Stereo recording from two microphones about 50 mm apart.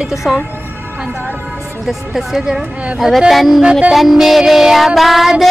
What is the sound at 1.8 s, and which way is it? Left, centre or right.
A woman's voice, centre.